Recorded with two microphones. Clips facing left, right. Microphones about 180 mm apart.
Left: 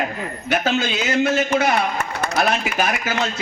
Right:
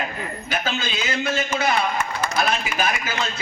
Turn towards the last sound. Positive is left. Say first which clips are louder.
# left 4 dB
turn(degrees=65)  # may be behind; listen again after turning